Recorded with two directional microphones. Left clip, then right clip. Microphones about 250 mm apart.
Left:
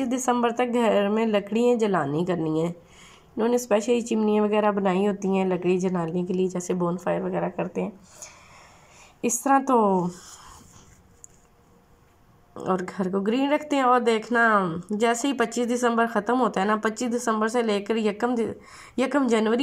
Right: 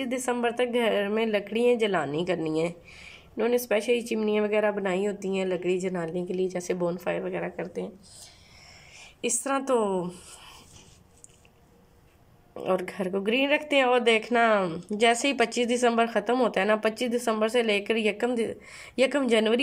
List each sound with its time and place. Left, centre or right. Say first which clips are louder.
0.0 s speech: left 4 dB; centre
9.3 s speech: left 6 dB; centre
12.5 s speech: left 1 dB; centre